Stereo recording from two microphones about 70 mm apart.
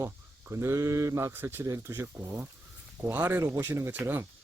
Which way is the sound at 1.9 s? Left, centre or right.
Right.